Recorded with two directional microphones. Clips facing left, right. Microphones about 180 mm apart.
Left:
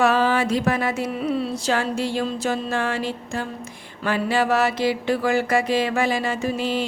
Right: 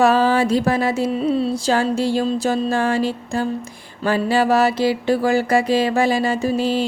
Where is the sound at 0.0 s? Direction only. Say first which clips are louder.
Right 4 dB; 35° right (ahead or behind).